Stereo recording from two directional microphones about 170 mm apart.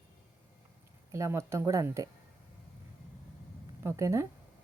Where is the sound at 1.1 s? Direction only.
15° right (ahead or behind).